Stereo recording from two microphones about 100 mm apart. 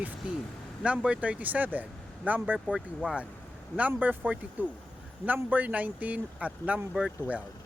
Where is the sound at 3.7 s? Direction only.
15° right (ahead or behind).